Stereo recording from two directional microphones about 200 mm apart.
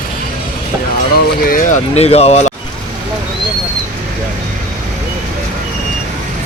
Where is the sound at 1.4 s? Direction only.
40° left (ahead or behind).